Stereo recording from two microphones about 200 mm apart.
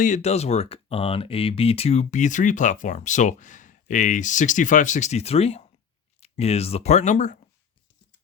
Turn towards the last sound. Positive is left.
turn(degrees=35)  # may be behind; listen again after turning